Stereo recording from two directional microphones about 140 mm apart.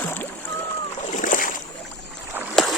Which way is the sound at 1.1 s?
70° left (ahead or behind).